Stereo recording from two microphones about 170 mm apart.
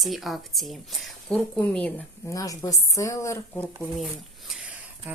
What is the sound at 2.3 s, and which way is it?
Speech, 20° left (ahead or behind).